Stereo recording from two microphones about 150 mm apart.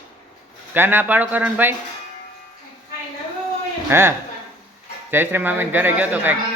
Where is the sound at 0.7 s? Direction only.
15° right (ahead or behind).